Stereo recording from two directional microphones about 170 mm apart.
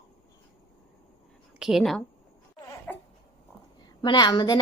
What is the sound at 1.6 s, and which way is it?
Speech, centre (ahead or behind).